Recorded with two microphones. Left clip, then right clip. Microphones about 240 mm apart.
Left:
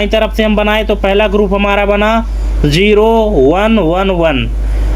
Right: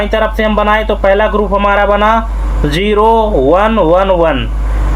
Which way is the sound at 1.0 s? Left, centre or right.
Left.